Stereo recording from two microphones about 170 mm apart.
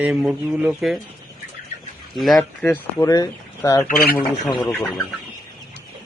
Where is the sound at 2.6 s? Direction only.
10° left (ahead or behind).